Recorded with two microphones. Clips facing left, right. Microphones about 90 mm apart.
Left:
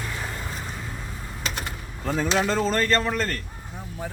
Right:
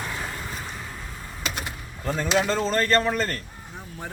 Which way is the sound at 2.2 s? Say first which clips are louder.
Even; 5° right (ahead or behind).